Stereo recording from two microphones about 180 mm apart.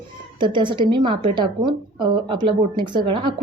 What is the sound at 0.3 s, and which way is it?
A woman's voice, 25° right (ahead or behind).